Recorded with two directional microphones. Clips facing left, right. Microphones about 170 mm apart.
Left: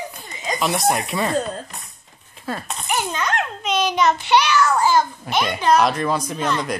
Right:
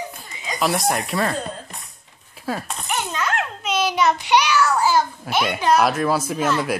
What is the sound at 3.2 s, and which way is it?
A child's voice, 5° right (ahead or behind).